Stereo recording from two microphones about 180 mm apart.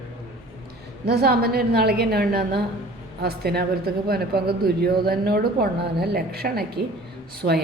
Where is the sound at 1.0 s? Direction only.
60° right (ahead or behind).